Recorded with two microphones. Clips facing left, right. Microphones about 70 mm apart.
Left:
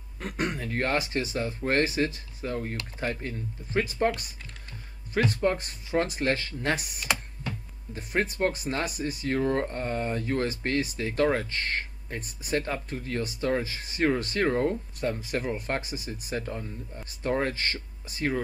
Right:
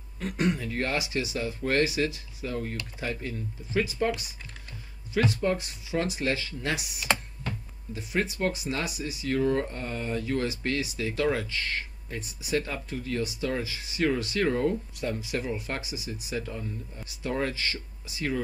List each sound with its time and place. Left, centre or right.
0.2 s speech: left
5.1 s speech: left